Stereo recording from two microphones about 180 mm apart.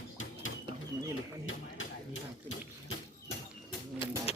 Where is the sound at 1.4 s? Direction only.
90° left.